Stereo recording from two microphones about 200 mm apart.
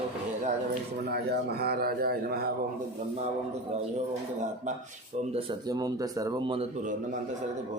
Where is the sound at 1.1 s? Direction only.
50° right (ahead or behind).